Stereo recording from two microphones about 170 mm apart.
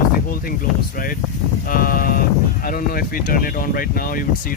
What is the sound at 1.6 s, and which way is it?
Speech, 60° left (ahead or behind).